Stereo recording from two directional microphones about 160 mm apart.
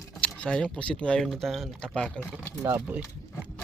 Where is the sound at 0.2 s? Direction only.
10° left (ahead or behind).